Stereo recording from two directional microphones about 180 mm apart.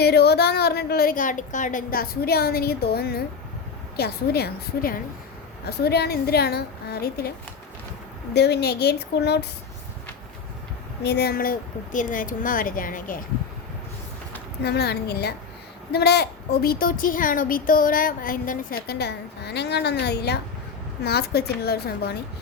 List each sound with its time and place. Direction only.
0.0 s a woman's voice: 65° left (ahead or behind)
11.0 s speech: 65° left (ahead or behind)
14.6 s a woman's voice: 65° left (ahead or behind)